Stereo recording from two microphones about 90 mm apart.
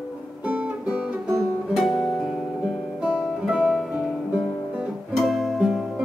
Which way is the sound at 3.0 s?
10° right (ahead or behind).